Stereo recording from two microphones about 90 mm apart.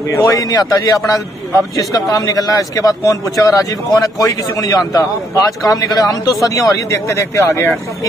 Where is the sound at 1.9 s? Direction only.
40° left (ahead or behind).